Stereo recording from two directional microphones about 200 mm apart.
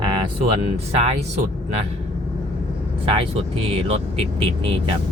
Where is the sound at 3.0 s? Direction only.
25° right (ahead or behind).